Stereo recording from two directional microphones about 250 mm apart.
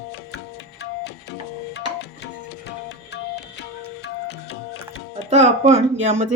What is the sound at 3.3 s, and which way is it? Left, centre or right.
Tabla, left.